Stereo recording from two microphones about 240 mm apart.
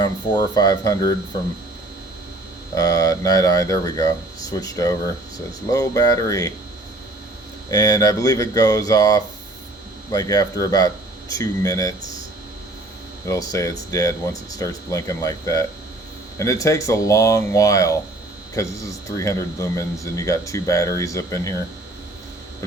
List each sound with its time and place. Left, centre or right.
0.0 s speech: centre
2.7 s speech: centre
7.7 s speech: centre
13.2 s speech: centre
19.1 s speech: centre